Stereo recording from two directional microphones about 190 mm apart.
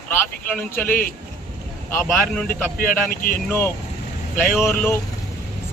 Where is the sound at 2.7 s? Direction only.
50° left (ahead or behind).